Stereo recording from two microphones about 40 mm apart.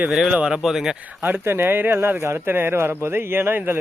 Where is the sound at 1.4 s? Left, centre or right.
Right.